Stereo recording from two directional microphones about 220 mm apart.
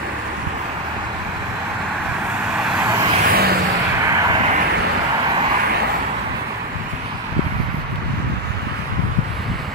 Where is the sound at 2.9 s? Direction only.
20° right (ahead or behind).